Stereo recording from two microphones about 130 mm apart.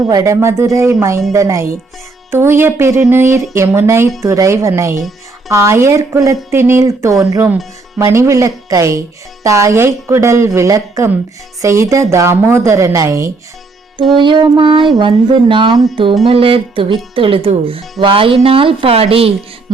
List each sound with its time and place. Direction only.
0.1 s speech: 25° right (ahead or behind)
14.2 s music: 35° right (ahead or behind)
16.2 s speech: 45° right (ahead or behind)